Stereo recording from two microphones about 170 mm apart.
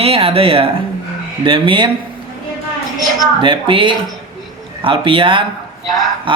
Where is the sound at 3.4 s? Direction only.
30° right (ahead or behind).